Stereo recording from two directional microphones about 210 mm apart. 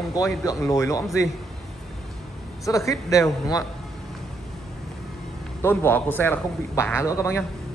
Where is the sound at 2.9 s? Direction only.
15° left (ahead or behind).